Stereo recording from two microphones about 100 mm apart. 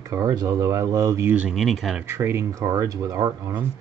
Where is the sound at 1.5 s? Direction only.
Centre (ahead or behind).